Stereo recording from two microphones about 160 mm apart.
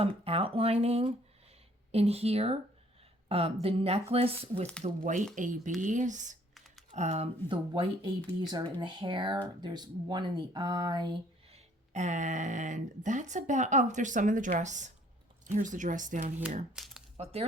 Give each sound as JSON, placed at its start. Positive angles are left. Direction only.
{"t": 0.0, "sound": "speech", "side_deg": -35}
{"t": 4.8, "sound": "speech", "side_deg": -50}
{"t": 11.5, "sound": "speech", "side_deg": -45}
{"t": 16.7, "sound": "speech", "side_deg": -5}